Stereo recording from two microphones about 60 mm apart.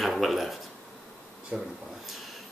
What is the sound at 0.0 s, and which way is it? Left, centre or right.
Speech, centre.